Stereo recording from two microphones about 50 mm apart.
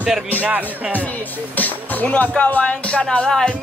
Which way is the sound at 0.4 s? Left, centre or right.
Right.